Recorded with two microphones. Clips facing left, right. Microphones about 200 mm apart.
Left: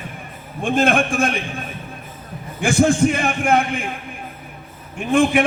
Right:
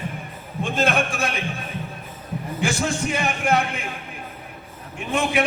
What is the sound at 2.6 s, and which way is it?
A man's voice, 50° left (ahead or behind).